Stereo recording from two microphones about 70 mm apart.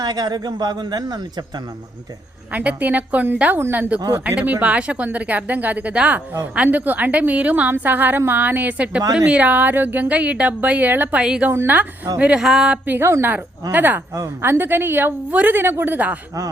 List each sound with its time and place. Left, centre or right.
0.0 s speech: right
2.5 s speech: right
11.2 s speech: centre
11.5 s speech: right
12.2 s speech: centre
12.8 s a woman's voice: right